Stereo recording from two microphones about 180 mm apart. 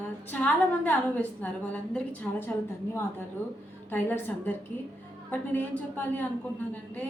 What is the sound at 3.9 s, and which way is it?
A woman's voice, 10° left (ahead or behind).